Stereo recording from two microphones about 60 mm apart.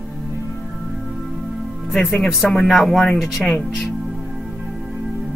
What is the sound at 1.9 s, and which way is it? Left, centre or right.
Speech, centre.